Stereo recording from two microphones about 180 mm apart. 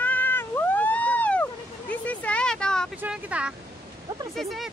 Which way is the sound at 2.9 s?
5° right (ahead or behind).